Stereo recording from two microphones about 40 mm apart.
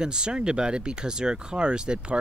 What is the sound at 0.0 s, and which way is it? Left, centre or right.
Speech, right.